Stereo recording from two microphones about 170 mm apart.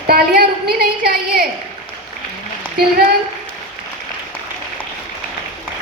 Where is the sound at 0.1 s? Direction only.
60° right (ahead or behind).